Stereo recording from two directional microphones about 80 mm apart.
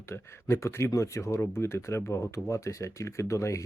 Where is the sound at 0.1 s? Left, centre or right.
Left.